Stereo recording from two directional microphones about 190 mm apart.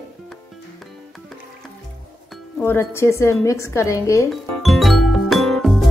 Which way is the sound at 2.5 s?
10° left (ahead or behind).